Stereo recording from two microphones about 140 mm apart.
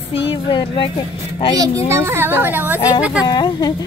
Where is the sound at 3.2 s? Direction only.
30° left (ahead or behind).